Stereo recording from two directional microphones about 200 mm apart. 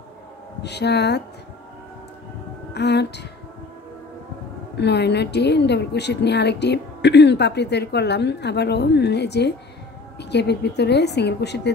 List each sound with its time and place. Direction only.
0.6 s a woman's voice: 55° left (ahead or behind)
2.7 s a woman's voice: 55° left (ahead or behind)
4.7 s a woman's voice: 55° left (ahead or behind)